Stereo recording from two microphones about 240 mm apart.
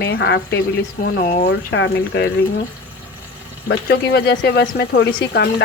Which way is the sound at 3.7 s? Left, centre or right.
Left.